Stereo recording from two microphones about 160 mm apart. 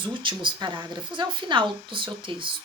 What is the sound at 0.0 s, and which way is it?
A woman's voice, 30° right (ahead or behind).